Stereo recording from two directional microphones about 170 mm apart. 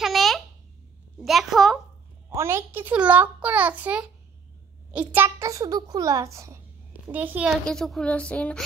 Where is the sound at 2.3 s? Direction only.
15° right (ahead or behind).